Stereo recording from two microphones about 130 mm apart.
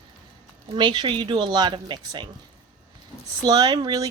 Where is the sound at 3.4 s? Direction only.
35° right (ahead or behind).